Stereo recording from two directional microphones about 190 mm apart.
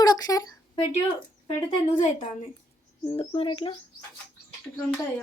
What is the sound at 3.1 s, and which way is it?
Speech, 30° left (ahead or behind).